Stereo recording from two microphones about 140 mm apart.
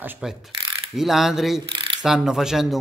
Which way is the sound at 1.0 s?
Centre (ahead or behind).